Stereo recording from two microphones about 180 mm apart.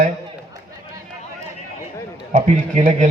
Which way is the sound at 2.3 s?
40° right (ahead or behind).